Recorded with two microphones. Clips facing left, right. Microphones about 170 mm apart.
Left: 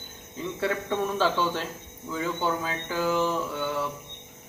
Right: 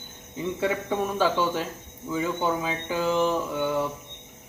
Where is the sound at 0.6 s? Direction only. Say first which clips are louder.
Right 1 dB; 15° right (ahead or behind).